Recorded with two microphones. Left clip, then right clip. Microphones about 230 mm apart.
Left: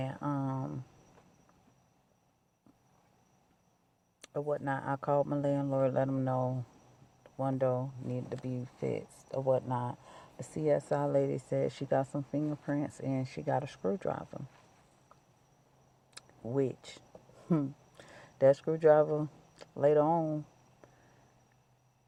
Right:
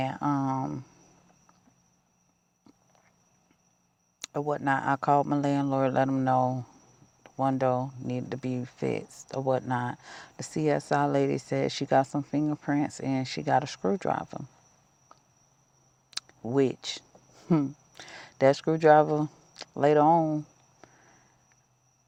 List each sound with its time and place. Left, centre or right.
0.0 s a sound: right
4.2 s speech: right
16.1 s speech: right